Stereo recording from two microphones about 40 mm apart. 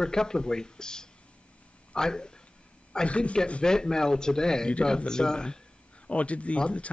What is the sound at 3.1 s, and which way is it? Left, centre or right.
Speech, left.